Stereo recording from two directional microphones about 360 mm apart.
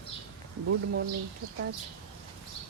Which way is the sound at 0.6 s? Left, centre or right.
Right.